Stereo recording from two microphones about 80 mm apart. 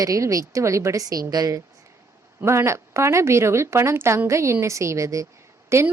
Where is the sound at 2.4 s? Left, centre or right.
Right.